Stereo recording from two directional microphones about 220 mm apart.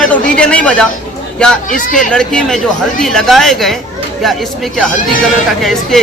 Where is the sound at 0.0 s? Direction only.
5° left (ahead or behind).